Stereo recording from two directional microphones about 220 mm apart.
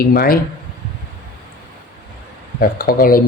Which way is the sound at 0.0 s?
40° left (ahead or behind).